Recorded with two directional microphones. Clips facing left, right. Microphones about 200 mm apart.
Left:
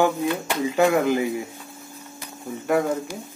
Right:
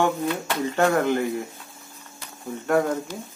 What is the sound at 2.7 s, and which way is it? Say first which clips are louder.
Speech: even; 10° left (ahead or behind).